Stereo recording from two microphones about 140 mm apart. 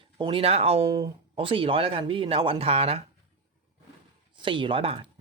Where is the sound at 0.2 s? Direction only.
40° right (ahead or behind).